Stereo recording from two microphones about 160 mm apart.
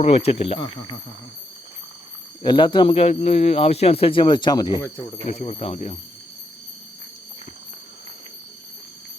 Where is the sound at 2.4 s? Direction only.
30° left (ahead or behind).